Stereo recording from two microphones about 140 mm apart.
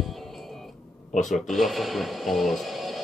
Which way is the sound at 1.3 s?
Centre (ahead or behind).